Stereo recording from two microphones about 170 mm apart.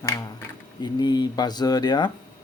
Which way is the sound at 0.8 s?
25° left (ahead or behind).